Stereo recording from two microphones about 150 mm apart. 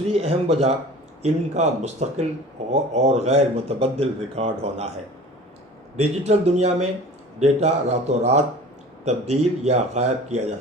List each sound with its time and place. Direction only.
0.1 s speech: 40° right (ahead or behind)
6.0 s speech: 45° right (ahead or behind)